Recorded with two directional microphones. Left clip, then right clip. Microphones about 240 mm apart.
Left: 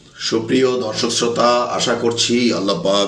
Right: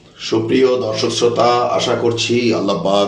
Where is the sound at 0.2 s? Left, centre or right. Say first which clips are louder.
Right 2 dB; left.